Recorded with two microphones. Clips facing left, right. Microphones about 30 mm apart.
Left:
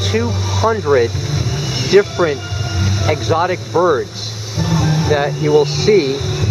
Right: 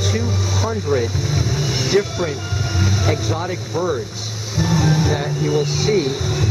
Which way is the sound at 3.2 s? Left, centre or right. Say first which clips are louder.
Left 8 dB; left.